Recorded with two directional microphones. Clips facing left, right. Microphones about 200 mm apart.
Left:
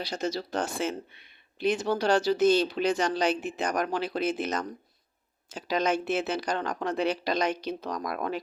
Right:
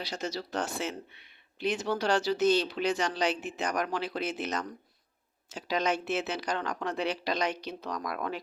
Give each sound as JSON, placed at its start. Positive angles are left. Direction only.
{"t": 0.2, "sound": "speech", "side_deg": 50}